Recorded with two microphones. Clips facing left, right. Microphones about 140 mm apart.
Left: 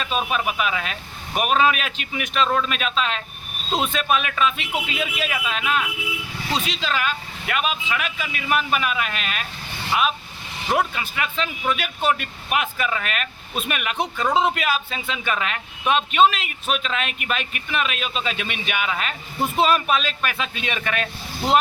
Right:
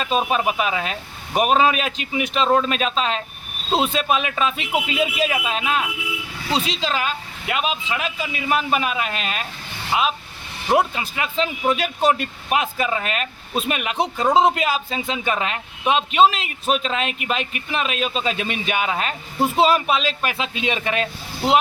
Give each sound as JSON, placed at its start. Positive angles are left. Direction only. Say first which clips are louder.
{"t": 0.0, "sound": "speech", "louder": "right 4 dB", "side_deg": -35}